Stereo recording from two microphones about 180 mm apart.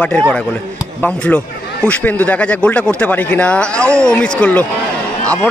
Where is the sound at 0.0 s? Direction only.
5° left (ahead or behind).